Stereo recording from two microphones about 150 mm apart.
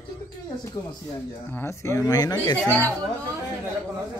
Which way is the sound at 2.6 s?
10° left (ahead or behind).